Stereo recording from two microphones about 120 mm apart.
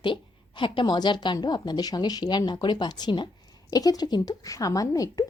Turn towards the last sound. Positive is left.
turn(degrees=30)  # may be behind; listen again after turning